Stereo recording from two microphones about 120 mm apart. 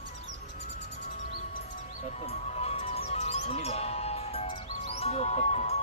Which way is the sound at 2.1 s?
65° left (ahead or behind).